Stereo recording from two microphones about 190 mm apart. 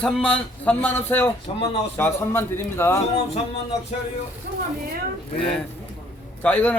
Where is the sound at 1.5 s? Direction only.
30° left (ahead or behind).